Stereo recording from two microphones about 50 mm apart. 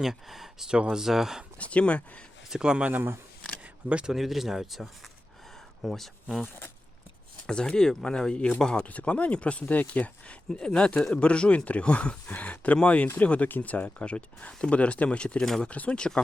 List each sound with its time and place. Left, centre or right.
0.0 s speech: centre
1.5 s speech: left
2.5 s speech: centre
4.0 s speech: centre
7.4 s speech: centre
10.6 s speech: centre